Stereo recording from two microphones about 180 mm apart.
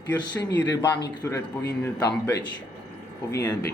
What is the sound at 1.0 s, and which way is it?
Speech, 20° left (ahead or behind).